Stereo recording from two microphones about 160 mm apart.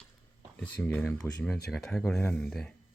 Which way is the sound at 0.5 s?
5° left (ahead or behind).